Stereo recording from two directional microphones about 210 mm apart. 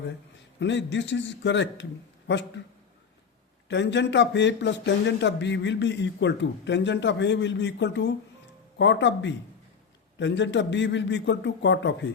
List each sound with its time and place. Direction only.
0.6 s speech: 60° left (ahead or behind)
3.7 s speech: 60° left (ahead or behind)